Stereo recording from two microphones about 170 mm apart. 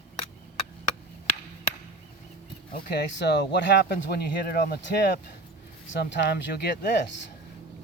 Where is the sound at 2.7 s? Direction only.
80° left.